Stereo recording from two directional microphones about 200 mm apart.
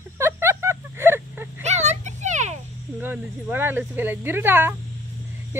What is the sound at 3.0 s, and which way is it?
Speech, 10° right (ahead or behind).